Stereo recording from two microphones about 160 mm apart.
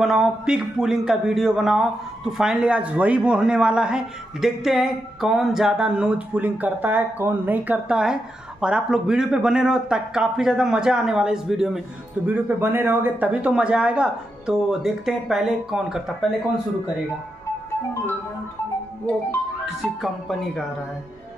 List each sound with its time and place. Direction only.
0.0 s a man's voice: 5° right (ahead or behind)
19.6 s speech: centre (ahead or behind)